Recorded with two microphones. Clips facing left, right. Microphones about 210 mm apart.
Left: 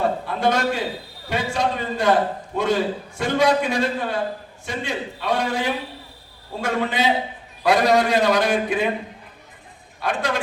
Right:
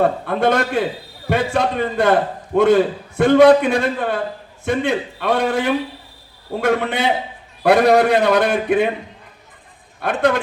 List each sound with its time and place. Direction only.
0.0 s a man's voice: 55° right (ahead or behind)
10.0 s a man's voice: 60° right (ahead or behind)